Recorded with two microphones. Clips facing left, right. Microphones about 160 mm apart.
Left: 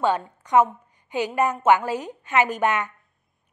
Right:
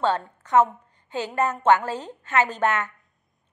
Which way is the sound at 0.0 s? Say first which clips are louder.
Left 1 dB; 15° left (ahead or behind).